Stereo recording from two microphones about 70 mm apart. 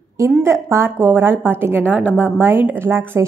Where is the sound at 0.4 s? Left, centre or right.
Right.